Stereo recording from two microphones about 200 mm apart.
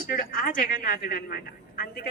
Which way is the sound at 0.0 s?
45° left (ahead or behind).